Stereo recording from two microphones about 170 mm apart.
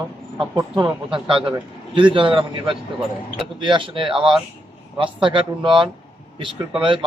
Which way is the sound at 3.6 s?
30° right (ahead or behind).